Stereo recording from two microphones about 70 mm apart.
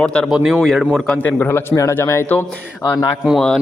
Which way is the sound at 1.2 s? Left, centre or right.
Left.